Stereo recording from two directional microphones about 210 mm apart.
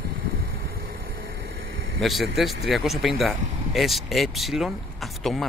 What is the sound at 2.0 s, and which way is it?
A man's voice, centre (ahead or behind).